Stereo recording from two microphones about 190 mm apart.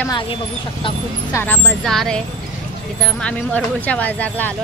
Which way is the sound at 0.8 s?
25° left (ahead or behind).